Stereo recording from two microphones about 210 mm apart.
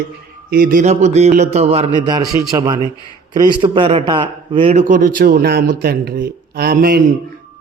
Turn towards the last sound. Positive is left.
turn(degrees=-45)  # may be behind; listen again after turning